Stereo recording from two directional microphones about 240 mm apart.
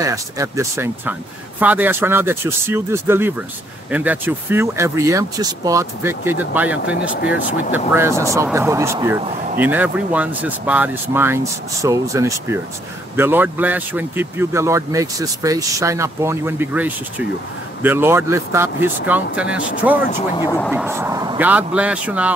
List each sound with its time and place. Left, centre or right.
0.0 s speech: centre
20.3 s speech: centre
20.7 s speech: centre